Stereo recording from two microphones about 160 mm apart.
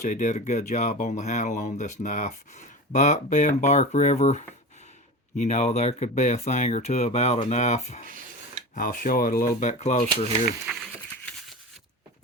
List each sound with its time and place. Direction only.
0.0 s speech: 50° left (ahead or behind)
8.0 s a sound: 55° right (ahead or behind)
8.7 s speech: 60° left (ahead or behind)
10.7 s crumpling: 5° right (ahead or behind)